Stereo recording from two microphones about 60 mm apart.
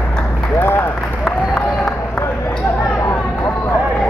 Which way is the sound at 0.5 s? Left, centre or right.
Left.